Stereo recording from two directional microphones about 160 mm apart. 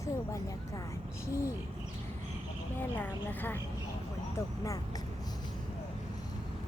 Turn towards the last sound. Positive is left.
turn(degrees=20)  # may be behind; listen again after turning